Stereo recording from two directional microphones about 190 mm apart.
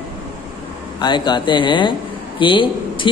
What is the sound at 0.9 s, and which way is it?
Speech, 25° left (ahead or behind).